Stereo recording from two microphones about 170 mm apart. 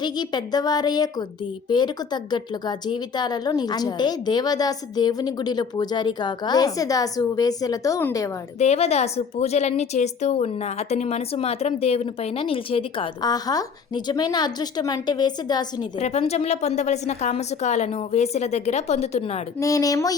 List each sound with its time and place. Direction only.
0.0 s speech: 25° left (ahead or behind)
8.5 s a woman's voice: 40° left (ahead or behind); by 15.9 s 25° left (ahead or behind)
16.0 s a woman's voice: 40° left (ahead or behind)
19.5 s speech: 20° left (ahead or behind)